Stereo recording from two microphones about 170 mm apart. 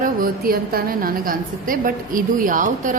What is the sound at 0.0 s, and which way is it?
A woman's voice, 60° right (ahead or behind).